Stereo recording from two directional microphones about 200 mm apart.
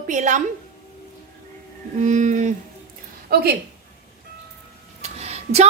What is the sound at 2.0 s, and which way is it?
Female singing, 40° right (ahead or behind).